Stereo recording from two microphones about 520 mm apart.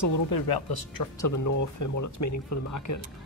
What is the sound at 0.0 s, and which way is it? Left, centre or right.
Speech, left.